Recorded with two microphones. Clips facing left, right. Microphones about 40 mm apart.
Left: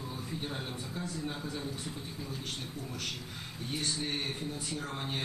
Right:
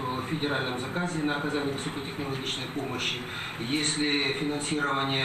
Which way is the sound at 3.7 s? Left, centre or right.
Right.